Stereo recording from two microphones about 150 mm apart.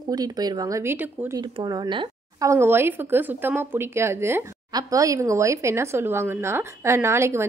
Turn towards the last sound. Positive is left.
turn(degrees=-15)  # may be behind; listen again after turning